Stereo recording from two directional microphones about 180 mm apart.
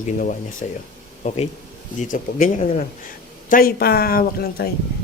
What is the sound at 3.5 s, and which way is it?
Speech, 55° left (ahead or behind).